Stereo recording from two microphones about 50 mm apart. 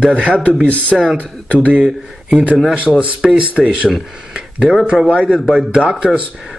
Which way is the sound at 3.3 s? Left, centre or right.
Right.